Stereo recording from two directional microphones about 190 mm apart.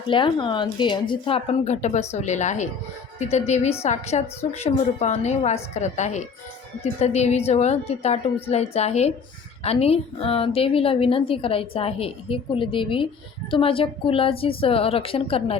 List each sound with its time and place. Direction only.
0.1 s a woman's voice: 25° left (ahead or behind)